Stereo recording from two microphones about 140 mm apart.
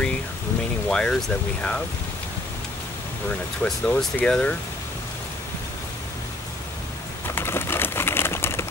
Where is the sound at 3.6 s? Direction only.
5° left (ahead or behind).